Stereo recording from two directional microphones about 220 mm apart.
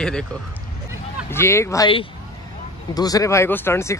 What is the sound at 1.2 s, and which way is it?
Speech, 10° left (ahead or behind).